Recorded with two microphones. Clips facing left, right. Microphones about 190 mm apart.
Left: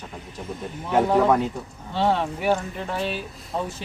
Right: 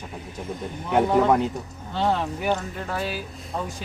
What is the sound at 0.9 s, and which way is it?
Speech, 5° left (ahead or behind).